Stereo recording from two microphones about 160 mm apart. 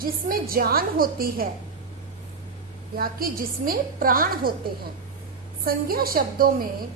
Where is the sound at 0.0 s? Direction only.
65° right (ahead or behind).